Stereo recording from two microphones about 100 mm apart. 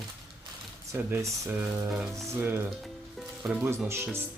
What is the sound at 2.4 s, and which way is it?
Speech, 20° right (ahead or behind).